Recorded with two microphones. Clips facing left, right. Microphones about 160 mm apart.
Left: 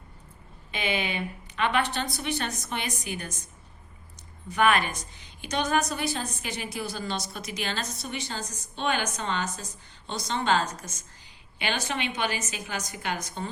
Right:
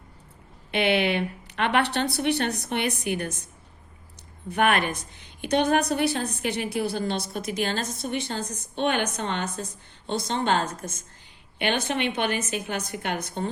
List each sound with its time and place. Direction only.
0.7 s a woman's voice: 70° right (ahead or behind)
4.4 s a woman's voice: 55° right (ahead or behind)